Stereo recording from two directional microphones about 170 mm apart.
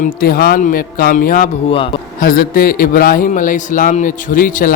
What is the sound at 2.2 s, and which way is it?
A man's voice, 60° left (ahead or behind).